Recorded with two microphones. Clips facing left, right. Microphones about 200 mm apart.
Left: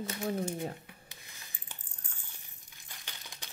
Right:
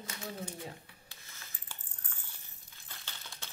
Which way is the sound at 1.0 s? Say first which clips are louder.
Left 1 dB; 20° left (ahead or behind).